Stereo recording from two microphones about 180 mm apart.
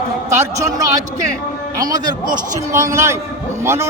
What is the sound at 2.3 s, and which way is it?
A man's voice, 15° right (ahead or behind).